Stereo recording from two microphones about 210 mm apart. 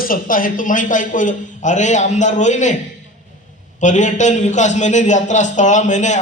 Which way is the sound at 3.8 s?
35° left (ahead or behind).